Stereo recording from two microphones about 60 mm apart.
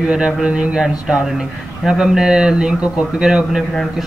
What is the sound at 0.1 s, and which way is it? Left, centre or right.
Speech, centre.